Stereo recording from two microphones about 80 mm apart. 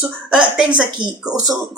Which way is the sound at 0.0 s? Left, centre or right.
Centre.